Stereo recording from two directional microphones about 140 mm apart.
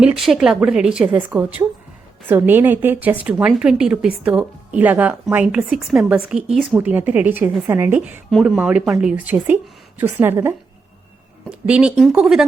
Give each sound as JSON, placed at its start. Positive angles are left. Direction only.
{"t": 0.0, "sound": "a woman's voice", "side_deg": 0}
{"t": 6.7, "sound": "a woman's voice", "side_deg": -15}
{"t": 8.3, "sound": "a woman's voice", "side_deg": 0}
{"t": 11.6, "sound": "a woman's voice", "side_deg": -10}